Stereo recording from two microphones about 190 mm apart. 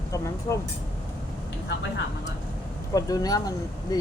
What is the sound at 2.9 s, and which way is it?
Speech, 20° left (ahead or behind).